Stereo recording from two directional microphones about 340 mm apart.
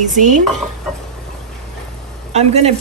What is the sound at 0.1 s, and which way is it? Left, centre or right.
Speech, right.